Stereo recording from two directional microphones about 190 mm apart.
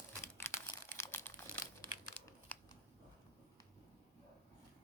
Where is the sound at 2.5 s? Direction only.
10° left (ahead or behind).